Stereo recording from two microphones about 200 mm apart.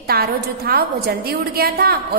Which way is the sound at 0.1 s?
50° right (ahead or behind).